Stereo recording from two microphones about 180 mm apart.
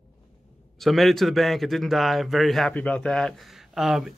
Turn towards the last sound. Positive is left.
turn(degrees=-5)  # may be behind; listen again after turning